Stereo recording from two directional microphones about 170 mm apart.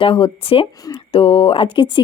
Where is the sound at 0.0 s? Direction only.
30° left (ahead or behind).